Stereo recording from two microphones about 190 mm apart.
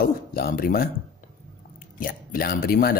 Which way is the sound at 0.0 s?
50° left (ahead or behind).